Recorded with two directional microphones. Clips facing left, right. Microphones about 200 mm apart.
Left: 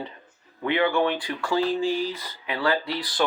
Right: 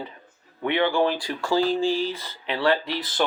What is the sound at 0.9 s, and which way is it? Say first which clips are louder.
Speech: right 1 dB; 30° right (ahead or behind).